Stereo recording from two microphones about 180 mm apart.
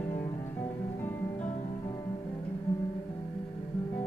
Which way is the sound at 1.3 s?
40° left (ahead or behind).